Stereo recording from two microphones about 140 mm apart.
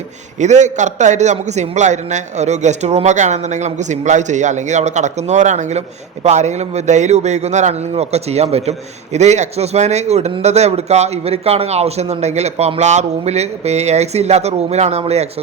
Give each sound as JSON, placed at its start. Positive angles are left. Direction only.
{"t": 0.3, "sound": "a man's voice", "side_deg": -55}